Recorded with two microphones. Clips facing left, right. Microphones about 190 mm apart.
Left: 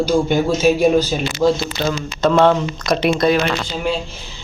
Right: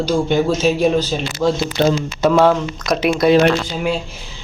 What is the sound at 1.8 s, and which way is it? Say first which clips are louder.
Speech: right 10 dB; 55° right (ahead or behind).